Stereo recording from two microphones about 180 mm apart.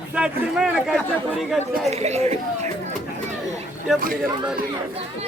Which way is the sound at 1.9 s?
35° right (ahead or behind).